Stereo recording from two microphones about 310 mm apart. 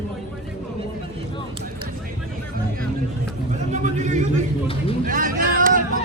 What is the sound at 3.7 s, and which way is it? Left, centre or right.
Vehicle, right.